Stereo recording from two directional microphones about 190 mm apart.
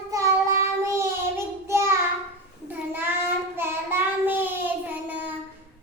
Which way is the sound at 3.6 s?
10° right (ahead or behind).